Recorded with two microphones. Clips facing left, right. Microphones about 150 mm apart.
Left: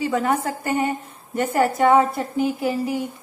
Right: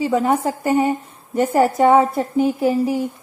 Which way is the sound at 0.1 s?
20° right (ahead or behind).